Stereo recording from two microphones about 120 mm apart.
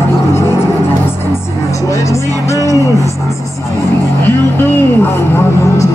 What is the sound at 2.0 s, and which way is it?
Speech, 25° left (ahead or behind).